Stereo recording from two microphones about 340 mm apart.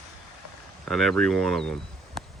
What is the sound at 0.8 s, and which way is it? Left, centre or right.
Speech, centre.